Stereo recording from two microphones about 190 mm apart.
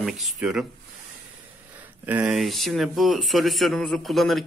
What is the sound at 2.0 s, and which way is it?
Speech, 10° right (ahead or behind).